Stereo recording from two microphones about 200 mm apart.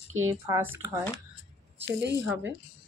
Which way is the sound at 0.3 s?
10° right (ahead or behind).